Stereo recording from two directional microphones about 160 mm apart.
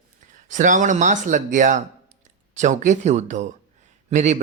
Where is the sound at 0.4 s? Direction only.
50° right (ahead or behind).